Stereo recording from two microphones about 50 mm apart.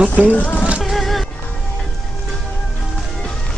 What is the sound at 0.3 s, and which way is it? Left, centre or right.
Rain, left.